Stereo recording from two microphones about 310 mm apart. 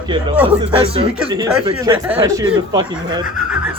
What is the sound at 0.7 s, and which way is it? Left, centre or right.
A man's voice, centre.